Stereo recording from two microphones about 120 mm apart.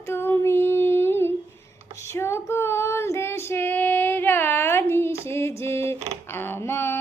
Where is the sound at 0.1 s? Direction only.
20° left (ahead or behind).